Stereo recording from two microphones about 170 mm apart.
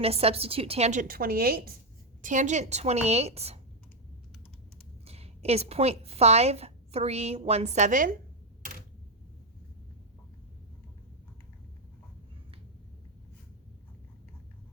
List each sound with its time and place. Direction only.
0.0 s a woman's voice: 35° right (ahead or behind); by 1.7 s 60° right (ahead or behind)
2.2 s a woman's voice: 45° right (ahead or behind)
5.0 s a woman's voice: 35° right (ahead or behind)